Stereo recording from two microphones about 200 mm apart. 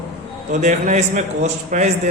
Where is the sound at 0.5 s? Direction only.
35° right (ahead or behind).